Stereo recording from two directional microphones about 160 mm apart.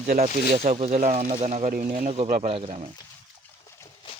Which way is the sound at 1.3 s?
40° right (ahead or behind).